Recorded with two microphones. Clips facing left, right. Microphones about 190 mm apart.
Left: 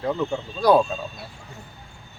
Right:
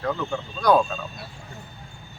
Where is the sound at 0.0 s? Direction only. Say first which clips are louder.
Left 2 dB; 20° left (ahead or behind).